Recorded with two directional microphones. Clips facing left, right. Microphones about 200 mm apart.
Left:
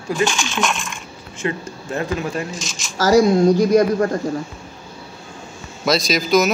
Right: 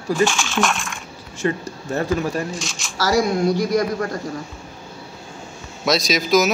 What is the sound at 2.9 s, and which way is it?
A woman's voice, 45° left (ahead or behind).